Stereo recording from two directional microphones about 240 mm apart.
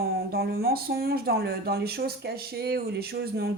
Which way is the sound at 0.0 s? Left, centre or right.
Right.